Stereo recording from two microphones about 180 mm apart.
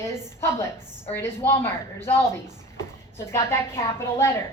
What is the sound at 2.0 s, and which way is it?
Speech, 10° left (ahead or behind).